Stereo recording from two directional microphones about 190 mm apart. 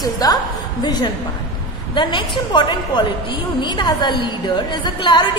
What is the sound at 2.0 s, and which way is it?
A woman's voice, 25° left (ahead or behind).